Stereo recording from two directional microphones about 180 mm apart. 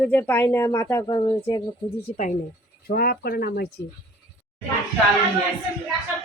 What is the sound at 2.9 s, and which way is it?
Speech, 55° left (ahead or behind).